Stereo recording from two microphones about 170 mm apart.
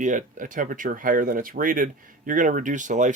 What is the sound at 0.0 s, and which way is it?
Speech, 45° right (ahead or behind).